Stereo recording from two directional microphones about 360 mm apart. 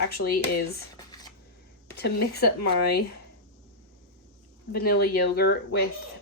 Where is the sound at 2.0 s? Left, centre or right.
Left.